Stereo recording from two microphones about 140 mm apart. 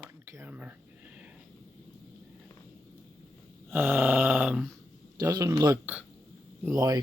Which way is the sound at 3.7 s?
15° right (ahead or behind).